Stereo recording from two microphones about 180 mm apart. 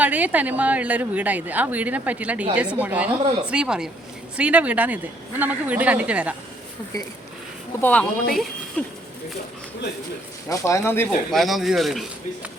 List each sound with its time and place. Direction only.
0.0 s a woman's voice: 10° right (ahead or behind)
6.9 s speech: 20° left (ahead or behind)
7.8 s a woman's voice: 10° left (ahead or behind)
10.5 s a woman's voice: 15° left (ahead or behind)
11.3 s speech: centre (ahead or behind)